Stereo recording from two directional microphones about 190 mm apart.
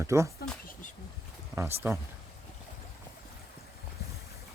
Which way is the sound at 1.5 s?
15° right (ahead or behind).